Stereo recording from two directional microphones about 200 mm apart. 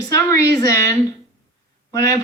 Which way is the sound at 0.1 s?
15° left (ahead or behind).